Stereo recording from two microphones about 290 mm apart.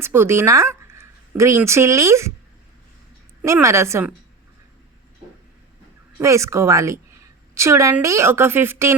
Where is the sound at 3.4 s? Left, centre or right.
Centre.